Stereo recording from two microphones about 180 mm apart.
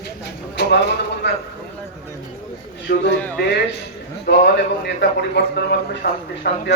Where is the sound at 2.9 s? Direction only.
65° left (ahead or behind).